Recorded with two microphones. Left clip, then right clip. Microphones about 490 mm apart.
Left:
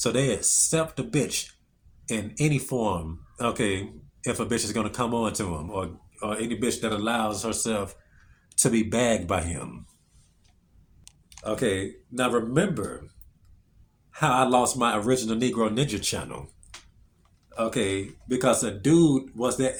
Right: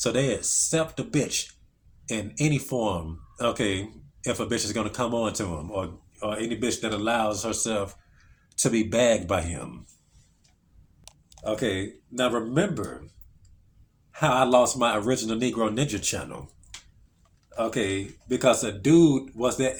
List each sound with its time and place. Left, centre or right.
0.0 s speech: left
11.3 s speech: left
14.1 s speech: left
17.5 s speech: left